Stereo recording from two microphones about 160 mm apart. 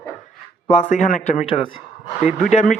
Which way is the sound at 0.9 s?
50° left (ahead or behind).